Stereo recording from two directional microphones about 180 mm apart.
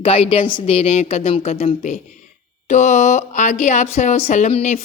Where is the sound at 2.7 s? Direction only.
45° left (ahead or behind).